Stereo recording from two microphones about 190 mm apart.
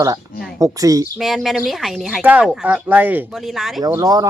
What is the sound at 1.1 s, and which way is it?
A woman's voice, centre (ahead or behind).